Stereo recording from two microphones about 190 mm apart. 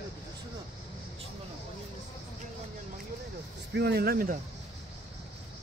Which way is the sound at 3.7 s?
65° right (ahead or behind).